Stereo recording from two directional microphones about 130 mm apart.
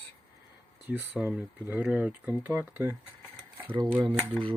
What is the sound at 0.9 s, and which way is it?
Speech, 15° right (ahead or behind).